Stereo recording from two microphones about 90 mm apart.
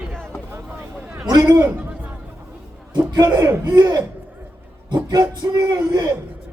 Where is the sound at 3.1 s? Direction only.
50° right (ahead or behind).